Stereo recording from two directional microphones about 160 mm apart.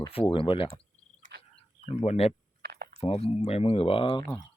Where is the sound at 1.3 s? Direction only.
90° right.